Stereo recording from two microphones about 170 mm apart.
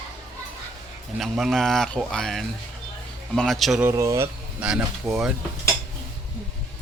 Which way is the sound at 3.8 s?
15° right (ahead or behind).